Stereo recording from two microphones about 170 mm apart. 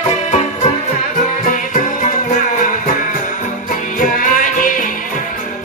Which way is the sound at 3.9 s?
55° left (ahead or behind).